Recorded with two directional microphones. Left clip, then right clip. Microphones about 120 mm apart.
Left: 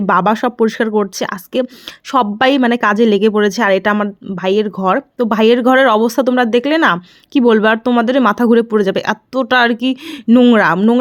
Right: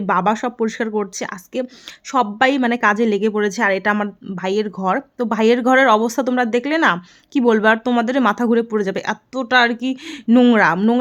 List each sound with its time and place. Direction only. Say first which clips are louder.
0.0 s speech: left 5 dB; 30° left (ahead or behind)
3.9 s speech: left 5 dB; 10° left (ahead or behind)
10.2 s speech: left 4 dB; 10° left (ahead or behind)
10.5 s speech: left 3 dB; 25° left (ahead or behind)
10.8 s speech: left 5 dB; 15° left (ahead or behind)